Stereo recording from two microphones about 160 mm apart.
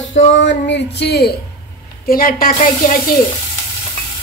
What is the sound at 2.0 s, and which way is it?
A woman's voice, 65° left (ahead or behind).